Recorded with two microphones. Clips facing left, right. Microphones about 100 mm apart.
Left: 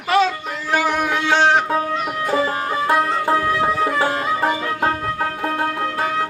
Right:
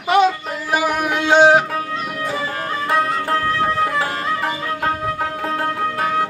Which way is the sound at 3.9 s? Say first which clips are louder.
Left 2 dB; 25° left (ahead or behind).